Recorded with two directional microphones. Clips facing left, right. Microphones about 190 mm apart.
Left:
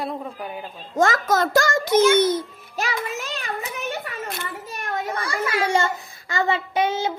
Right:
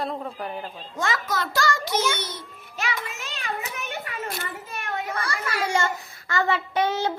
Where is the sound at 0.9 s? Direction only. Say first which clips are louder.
Left 8 dB; 45° left (ahead or behind).